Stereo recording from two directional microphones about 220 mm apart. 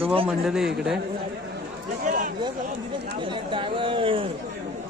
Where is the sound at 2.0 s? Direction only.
35° right (ahead or behind).